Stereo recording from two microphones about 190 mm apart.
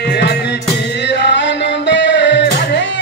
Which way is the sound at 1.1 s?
65° left (ahead or behind).